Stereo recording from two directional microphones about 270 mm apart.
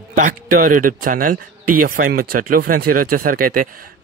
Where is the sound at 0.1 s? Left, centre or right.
Right.